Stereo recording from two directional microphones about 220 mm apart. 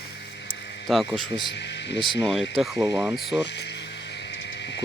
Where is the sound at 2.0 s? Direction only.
Centre (ahead or behind).